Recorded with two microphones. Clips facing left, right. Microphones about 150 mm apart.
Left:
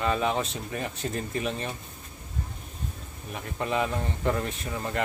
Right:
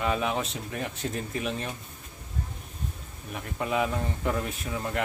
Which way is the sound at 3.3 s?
5° right (ahead or behind).